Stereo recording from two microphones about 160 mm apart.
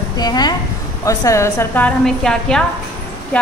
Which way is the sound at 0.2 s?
25° left (ahead or behind).